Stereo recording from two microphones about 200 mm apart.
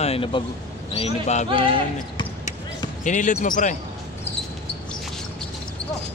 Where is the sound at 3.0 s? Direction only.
35° left (ahead or behind).